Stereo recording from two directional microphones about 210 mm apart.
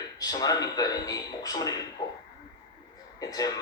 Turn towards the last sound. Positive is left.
turn(degrees=15)  # may be behind; listen again after turning